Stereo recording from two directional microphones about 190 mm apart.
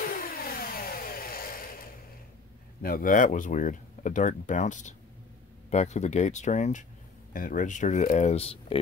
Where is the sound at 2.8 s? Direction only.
50° left (ahead or behind).